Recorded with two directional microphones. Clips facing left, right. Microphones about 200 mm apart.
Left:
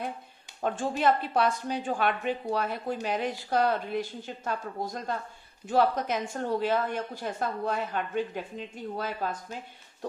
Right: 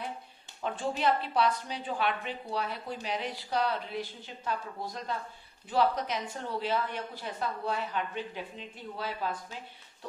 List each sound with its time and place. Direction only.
0.6 s a woman's voice: 45° left (ahead or behind)